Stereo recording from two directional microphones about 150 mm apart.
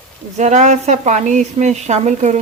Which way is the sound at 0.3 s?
50° right (ahead or behind).